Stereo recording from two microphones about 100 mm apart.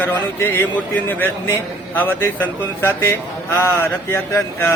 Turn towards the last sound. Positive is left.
turn(degrees=25)  # may be behind; listen again after turning